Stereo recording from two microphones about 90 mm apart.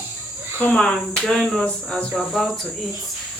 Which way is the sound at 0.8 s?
5° left (ahead or behind).